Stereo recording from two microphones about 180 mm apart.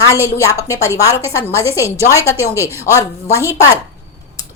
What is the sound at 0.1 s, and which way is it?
A woman's voice, 15° left (ahead or behind).